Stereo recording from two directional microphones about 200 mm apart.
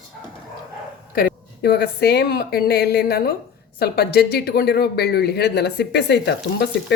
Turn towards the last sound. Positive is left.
turn(degrees=55)  # may be behind; listen again after turning